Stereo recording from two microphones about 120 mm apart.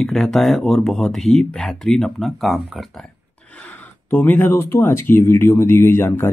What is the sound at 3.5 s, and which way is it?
Speech, 15° left (ahead or behind).